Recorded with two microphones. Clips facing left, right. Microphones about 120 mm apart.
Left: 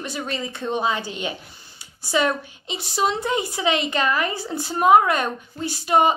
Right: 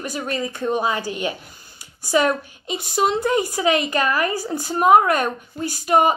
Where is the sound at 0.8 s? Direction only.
25° left (ahead or behind).